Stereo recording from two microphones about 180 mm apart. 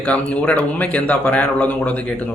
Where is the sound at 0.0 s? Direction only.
5° left (ahead or behind).